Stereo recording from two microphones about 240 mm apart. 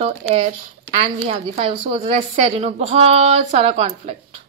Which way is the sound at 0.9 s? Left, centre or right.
Right.